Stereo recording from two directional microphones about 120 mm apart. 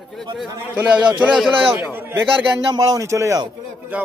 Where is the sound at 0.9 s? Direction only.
40° right (ahead or behind).